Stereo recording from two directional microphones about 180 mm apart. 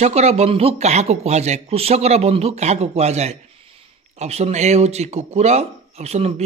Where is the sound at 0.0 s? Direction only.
35° right (ahead or behind).